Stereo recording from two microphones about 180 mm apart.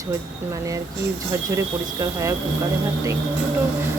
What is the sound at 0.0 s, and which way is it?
Speech, 15° right (ahead or behind).